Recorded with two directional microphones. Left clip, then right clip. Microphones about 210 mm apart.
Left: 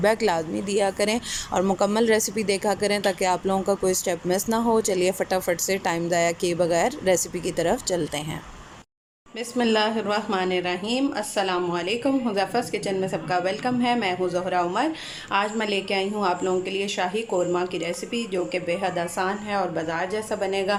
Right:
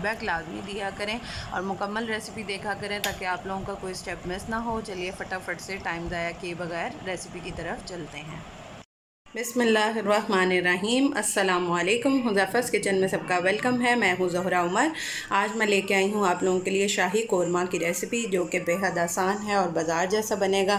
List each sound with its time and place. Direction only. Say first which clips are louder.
0.0 s a woman's voice: left 7 dB; 20° left (ahead or behind)
9.6 s a woman's voice: left 1 dB; centre (ahead or behind)